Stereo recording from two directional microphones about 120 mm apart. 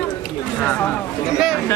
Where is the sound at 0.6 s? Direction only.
20° left (ahead or behind).